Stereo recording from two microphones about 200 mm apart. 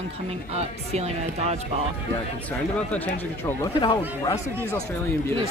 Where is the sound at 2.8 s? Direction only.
5° left (ahead or behind).